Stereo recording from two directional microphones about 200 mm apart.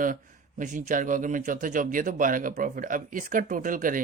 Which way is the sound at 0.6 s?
40° right (ahead or behind).